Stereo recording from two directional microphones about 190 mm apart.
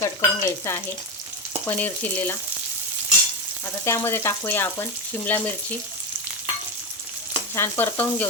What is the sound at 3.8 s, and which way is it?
Frying, 15° left (ahead or behind).